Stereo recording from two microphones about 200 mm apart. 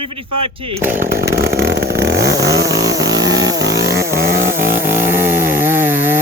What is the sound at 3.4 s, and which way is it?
Chainsaw, 15° right (ahead or behind).